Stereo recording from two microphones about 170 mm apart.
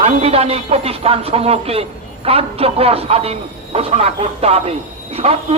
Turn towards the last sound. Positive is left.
turn(degrees=-35)  # may be behind; listen again after turning